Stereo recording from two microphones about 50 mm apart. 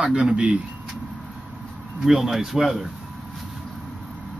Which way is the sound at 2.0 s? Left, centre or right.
Centre.